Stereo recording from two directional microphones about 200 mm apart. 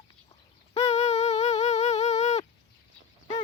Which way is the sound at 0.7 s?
30° left (ahead or behind).